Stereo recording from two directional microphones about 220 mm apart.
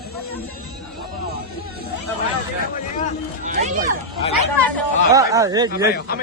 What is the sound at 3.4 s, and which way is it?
Speech, 35° right (ahead or behind).